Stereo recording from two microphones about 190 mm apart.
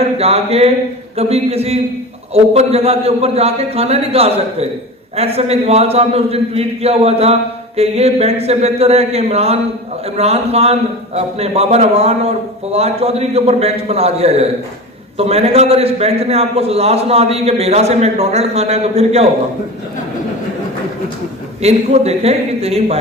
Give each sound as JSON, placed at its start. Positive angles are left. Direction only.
{"t": 0.0, "sound": "a man's voice", "side_deg": -35}
{"t": 21.6, "sound": "a man's voice", "side_deg": -35}